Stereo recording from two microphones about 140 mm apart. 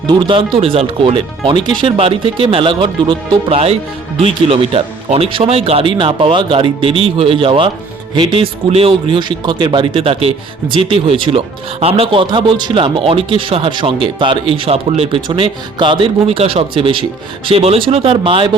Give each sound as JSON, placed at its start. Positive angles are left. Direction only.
{"t": 0.1, "sound": "speech", "side_deg": -35}